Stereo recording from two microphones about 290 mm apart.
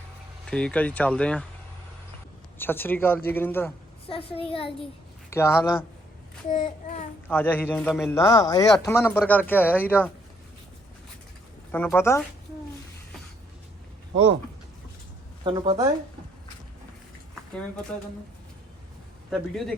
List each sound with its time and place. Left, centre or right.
0.4 s speech: centre
2.6 s a man's voice: centre
4.0 s a child's voice: centre
6.5 s child singing: left
7.3 s a man's voice: centre
11.7 s a man's voice: centre
15.4 s speech: centre
19.3 s speech: centre